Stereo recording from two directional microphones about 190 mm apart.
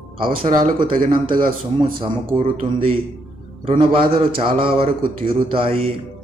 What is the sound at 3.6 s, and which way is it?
Speech, 30° right (ahead or behind).